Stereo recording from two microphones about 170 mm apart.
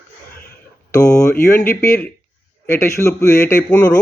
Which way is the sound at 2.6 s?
15° left (ahead or behind).